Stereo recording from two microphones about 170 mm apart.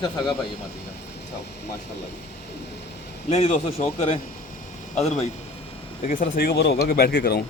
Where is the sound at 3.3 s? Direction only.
40° left (ahead or behind).